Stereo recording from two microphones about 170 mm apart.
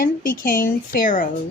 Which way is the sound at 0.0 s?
55° left (ahead or behind).